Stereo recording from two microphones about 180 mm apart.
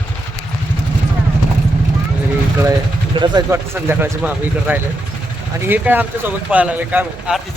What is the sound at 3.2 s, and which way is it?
Speech, 25° right (ahead or behind).